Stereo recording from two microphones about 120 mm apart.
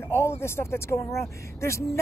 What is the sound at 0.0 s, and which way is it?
Speech, 20° left (ahead or behind).